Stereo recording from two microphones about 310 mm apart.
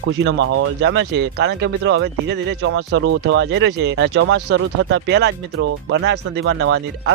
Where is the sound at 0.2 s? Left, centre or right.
Right.